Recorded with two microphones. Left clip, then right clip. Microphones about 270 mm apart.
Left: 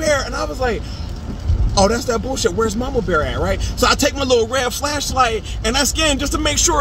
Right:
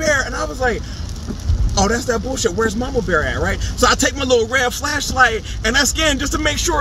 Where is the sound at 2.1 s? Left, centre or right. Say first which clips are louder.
Even; left.